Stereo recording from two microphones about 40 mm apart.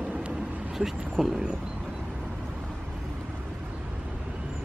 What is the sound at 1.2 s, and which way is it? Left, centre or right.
Speech, centre.